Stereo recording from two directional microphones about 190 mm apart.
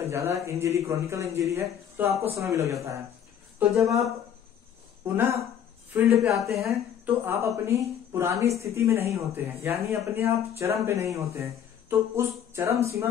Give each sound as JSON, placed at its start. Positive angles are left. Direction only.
{"t": 0.0, "sound": "speech", "side_deg": -15}
{"t": 5.0, "sound": "speech", "side_deg": -10}
{"t": 6.3, "sound": "a woman's voice", "side_deg": 0}
{"t": 7.1, "sound": "speech", "side_deg": -15}